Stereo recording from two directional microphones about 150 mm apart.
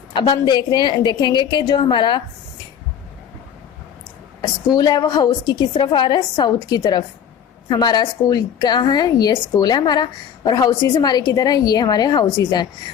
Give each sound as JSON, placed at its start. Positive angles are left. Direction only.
{"t": 0.1, "sound": "a woman's voice", "side_deg": 30}
{"t": 4.4, "sound": "a woman's voice", "side_deg": 25}